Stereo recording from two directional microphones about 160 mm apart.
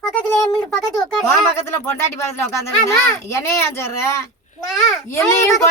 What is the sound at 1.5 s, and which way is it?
Speech, 15° left (ahead or behind).